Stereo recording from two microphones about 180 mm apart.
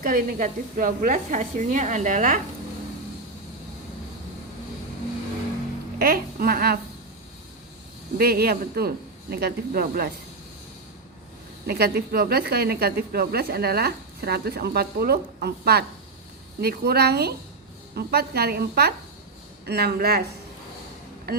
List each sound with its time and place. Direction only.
0.0 s speech: 50° right (ahead or behind)
6.0 s a woman's voice: 55° right (ahead or behind)
8.2 s a woman's voice: 60° right (ahead or behind)
11.6 s a woman's voice: 60° right (ahead or behind)